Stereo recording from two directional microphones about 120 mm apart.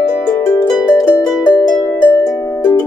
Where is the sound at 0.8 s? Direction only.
30° left (ahead or behind).